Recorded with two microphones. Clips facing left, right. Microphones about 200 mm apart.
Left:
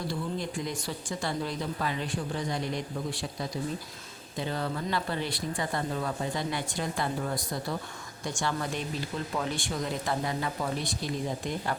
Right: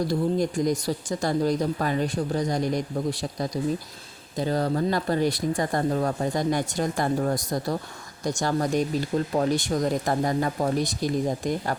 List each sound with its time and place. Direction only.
0.1 s speech: 40° right (ahead or behind)